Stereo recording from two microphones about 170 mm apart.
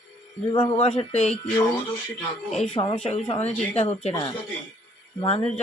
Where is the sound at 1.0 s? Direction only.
40° left (ahead or behind).